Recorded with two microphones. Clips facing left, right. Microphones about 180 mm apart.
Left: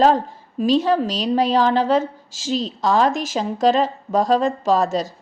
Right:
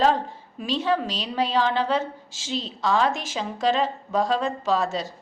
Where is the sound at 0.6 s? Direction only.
40° left (ahead or behind).